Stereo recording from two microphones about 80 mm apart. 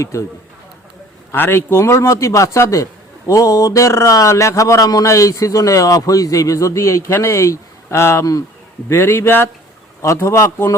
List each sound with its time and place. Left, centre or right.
0.0 s a man's voice: left
1.3 s a man's voice: left
8.2 s speech: left
8.9 s a man's voice: left